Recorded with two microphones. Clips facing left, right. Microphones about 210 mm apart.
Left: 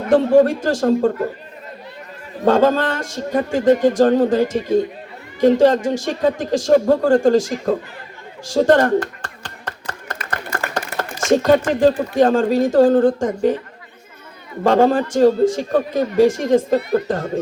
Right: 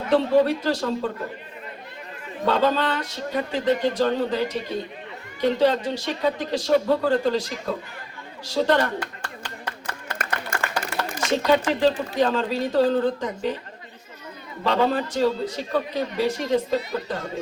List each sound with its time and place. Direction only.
0.1 s speech: 45° left (ahead or behind)
2.4 s speech: 45° left (ahead or behind)
10.3 s speech: 45° left (ahead or behind)
14.6 s speech: 45° left (ahead or behind)